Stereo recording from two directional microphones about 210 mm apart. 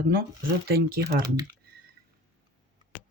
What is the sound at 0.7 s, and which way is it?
Speech, 45° right (ahead or behind).